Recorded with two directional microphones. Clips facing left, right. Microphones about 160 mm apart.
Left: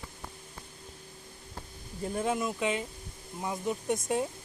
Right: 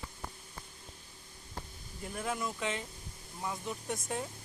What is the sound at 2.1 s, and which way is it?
Speech, 20° left (ahead or behind).